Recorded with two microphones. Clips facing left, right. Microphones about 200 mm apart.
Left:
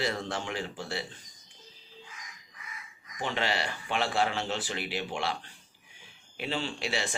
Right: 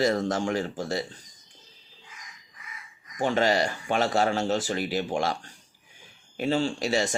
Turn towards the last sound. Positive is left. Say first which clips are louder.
# right 7 dB
turn(degrees=-40)  # may be behind; listen again after turning